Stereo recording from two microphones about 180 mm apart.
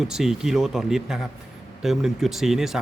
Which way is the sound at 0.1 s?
Centre (ahead or behind).